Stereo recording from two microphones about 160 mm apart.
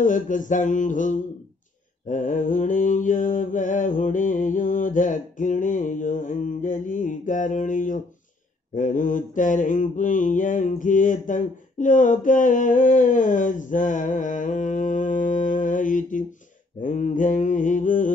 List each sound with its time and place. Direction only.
0.0 s mantra: 55° left (ahead or behind)